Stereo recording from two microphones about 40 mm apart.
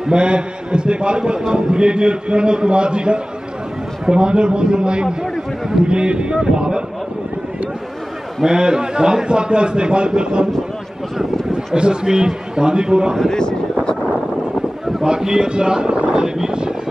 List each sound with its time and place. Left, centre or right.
0.0 s a man's voice: right
8.5 s a man's voice: centre
11.5 s a man's voice: right
13.3 s speech: centre
15.0 s a man's voice: centre